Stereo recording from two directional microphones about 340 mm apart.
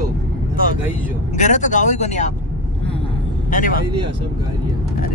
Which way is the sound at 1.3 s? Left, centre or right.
Left.